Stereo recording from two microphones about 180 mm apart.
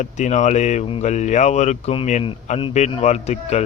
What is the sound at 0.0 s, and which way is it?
Speech, 40° left (ahead or behind).